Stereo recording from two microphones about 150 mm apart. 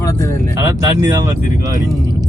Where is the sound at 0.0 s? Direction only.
20° left (ahead or behind).